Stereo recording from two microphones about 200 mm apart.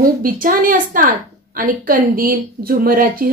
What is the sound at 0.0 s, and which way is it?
A woman's voice, 45° right (ahead or behind).